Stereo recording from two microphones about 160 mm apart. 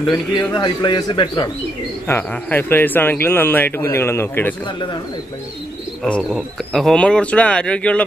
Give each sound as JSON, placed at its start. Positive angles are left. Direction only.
{"t": 0.0, "sound": "speech", "side_deg": 10}
{"t": 0.5, "sound": "speech", "side_deg": 25}
{"t": 2.0, "sound": "speech", "side_deg": 15}
{"t": 6.2, "sound": "speech", "side_deg": 0}